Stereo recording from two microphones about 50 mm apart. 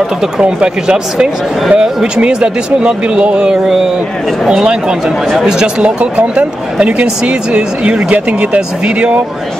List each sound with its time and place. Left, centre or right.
0.4 s speech: centre
5.0 s speech: centre
5.8 s speech: right